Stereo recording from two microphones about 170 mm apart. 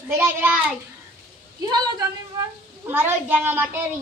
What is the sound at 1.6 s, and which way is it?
Speech, 20° right (ahead or behind).